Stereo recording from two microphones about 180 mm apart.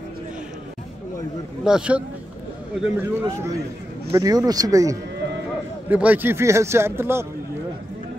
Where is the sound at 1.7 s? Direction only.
5° right (ahead or behind).